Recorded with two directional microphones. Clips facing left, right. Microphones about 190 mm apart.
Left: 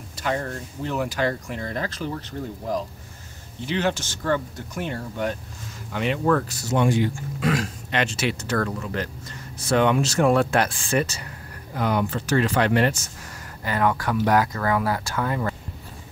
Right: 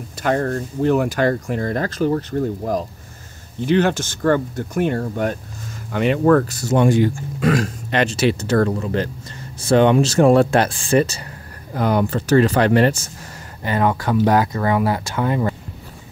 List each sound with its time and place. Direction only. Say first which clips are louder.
0.2 s speech: right 7 dB; 55° right (ahead or behind); by 13.1 s 35° right (ahead or behind)
13.7 s speech: right 4 dB; 25° right (ahead or behind)